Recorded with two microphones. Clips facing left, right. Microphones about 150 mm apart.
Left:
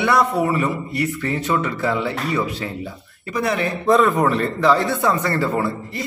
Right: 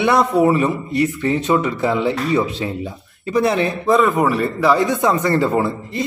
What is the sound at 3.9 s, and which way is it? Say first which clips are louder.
A man's voice: even; 5° right (ahead or behind).